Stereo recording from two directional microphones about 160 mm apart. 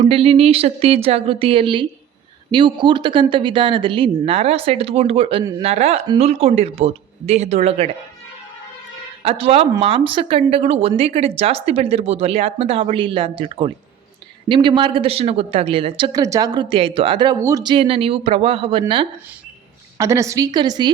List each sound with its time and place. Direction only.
0.0 s speech: 35° right (ahead or behind)
5.4 s a woman's voice: 25° right (ahead or behind)
5.6 s speech: 40° right (ahead or behind)
9.2 s speech: 35° right (ahead or behind)
20.0 s a woman's voice: 20° right (ahead or behind)